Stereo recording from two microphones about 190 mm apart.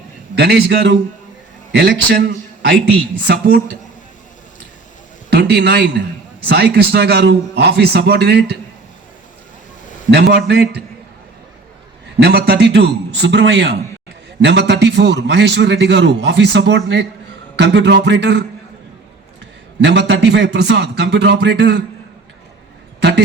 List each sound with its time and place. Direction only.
0.3 s a man's voice: 60° right (ahead or behind)
5.3 s a man's voice: 60° right (ahead or behind)
10.1 s a man's voice: 65° right (ahead or behind)
12.2 s a man's voice: 55° right (ahead or behind)
13.2 s a man's voice: 70° right (ahead or behind)
19.8 s a man's voice: 65° right (ahead or behind)
23.0 s speech: 65° right (ahead or behind)